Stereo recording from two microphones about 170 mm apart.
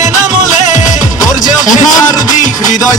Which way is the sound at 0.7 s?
45° left (ahead or behind).